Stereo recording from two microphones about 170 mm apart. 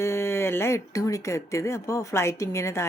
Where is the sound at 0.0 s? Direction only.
15° left (ahead or behind).